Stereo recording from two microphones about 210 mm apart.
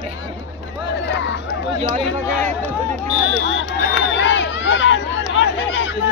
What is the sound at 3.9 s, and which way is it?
Crowd, 60° left (ahead or behind).